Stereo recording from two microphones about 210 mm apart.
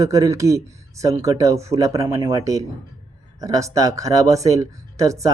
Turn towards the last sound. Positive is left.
turn(degrees=-15)  # may be behind; listen again after turning